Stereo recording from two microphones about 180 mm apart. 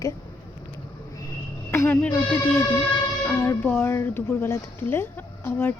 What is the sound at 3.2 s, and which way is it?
Speech, 15° left (ahead or behind).